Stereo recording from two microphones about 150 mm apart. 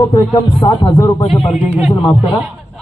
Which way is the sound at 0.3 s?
35° left (ahead or behind).